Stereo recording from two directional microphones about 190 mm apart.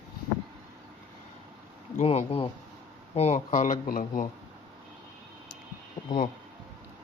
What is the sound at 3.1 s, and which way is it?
Speech, 35° left (ahead or behind).